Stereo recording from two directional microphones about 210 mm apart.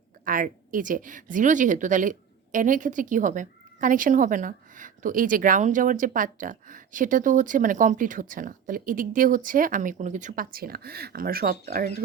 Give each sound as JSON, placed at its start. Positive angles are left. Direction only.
{"t": 0.3, "sound": "a woman's voice", "side_deg": -40}